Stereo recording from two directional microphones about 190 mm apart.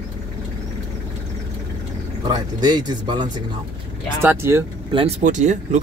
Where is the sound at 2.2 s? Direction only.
20° right (ahead or behind).